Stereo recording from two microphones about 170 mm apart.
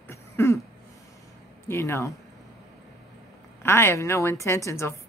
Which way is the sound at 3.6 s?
15° left (ahead or behind).